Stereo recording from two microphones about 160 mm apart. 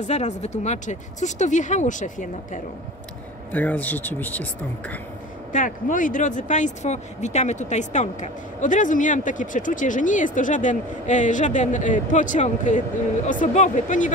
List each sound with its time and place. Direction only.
0.0 s speech: 45° left (ahead or behind)
3.5 s speech: 10° left (ahead or behind)
5.5 s speech: 55° left (ahead or behind)